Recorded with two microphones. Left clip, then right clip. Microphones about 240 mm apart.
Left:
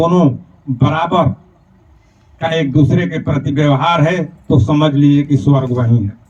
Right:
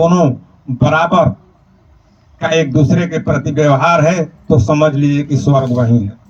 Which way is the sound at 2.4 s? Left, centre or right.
Right.